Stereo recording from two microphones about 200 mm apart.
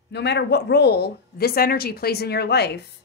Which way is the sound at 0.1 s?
55° left (ahead or behind).